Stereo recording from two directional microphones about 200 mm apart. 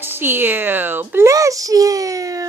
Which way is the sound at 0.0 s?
10° right (ahead or behind).